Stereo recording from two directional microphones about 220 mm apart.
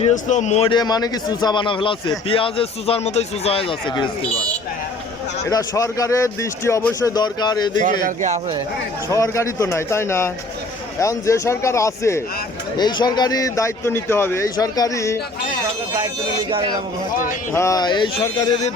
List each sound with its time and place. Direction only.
0.0 s a man's voice: 35° left (ahead or behind)
5.5 s speech: 15° left (ahead or behind)
8.0 s speech: 30° right (ahead or behind)
9.0 s speech: 15° left (ahead or behind)
16.5 s speech: 20° right (ahead or behind)
17.5 s speech: 15° left (ahead or behind)
18.3 s speech: 30° left (ahead or behind)